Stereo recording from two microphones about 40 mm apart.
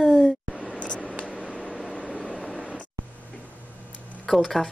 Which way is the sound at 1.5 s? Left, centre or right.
Centre.